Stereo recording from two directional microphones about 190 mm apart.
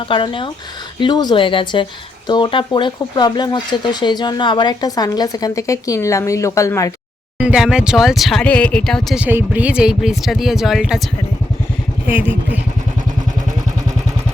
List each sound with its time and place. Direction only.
0.1 s speech: 25° left (ahead or behind)
7.3 s speech: 5° right (ahead or behind)
12.0 s speech: 10° right (ahead or behind)